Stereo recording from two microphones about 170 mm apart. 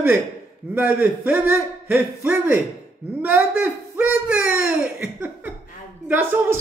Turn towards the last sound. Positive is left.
turn(degrees=-10)  # may be behind; listen again after turning